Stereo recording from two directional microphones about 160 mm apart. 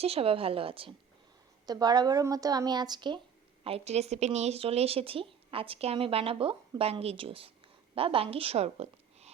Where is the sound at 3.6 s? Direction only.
40° right (ahead or behind).